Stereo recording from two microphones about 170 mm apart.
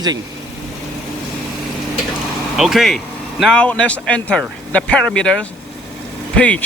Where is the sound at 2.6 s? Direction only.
Centre (ahead or behind).